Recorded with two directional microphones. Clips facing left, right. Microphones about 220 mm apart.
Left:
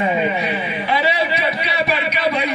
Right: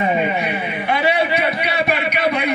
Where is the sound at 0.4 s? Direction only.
55° right (ahead or behind).